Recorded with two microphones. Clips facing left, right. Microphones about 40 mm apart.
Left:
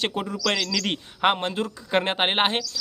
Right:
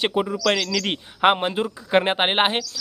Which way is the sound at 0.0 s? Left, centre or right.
Centre.